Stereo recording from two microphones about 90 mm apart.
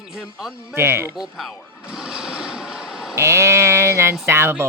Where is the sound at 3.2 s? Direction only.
30° right (ahead or behind).